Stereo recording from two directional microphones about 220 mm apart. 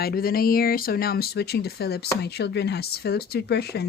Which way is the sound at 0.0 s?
45° left (ahead or behind).